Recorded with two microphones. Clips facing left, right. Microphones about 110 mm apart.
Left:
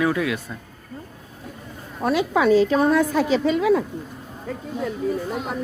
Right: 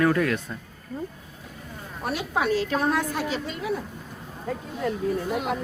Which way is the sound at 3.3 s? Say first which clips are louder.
Left 11 dB; 90° left.